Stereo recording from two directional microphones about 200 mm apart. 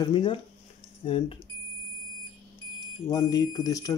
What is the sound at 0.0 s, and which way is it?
Speech, 25° left (ahead or behind).